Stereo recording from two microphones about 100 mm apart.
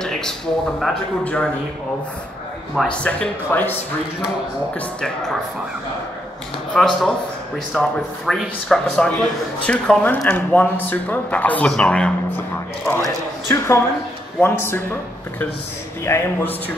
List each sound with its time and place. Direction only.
0.0 s speech: 5° left (ahead or behind)
2.9 s speech: 10° left (ahead or behind)
6.7 s speech: centre (ahead or behind)
12.4 s speech: 20° left (ahead or behind)